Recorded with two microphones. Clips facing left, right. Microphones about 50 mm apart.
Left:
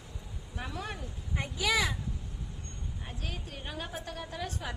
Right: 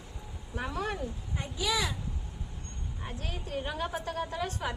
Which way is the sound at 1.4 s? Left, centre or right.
Left.